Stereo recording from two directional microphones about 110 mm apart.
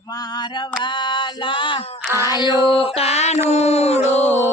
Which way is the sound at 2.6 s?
55° left (ahead or behind).